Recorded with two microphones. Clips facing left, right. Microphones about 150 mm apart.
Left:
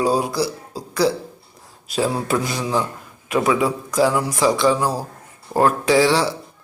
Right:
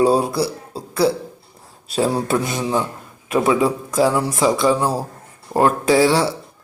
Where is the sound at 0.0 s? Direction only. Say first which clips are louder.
Right 3 dB; 25° right (ahead or behind).